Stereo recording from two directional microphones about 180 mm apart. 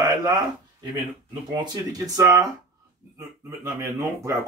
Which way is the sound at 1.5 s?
20° right (ahead or behind).